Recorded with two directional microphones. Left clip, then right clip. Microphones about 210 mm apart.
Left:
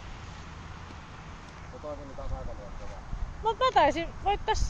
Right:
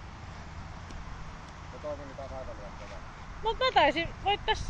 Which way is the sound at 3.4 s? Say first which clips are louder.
Left 1 dB; 10° left (ahead or behind).